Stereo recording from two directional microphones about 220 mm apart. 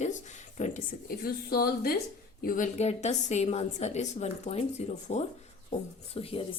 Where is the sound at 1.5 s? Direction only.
45° left (ahead or behind).